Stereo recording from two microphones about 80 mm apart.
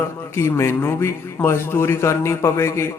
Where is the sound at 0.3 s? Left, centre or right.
Left.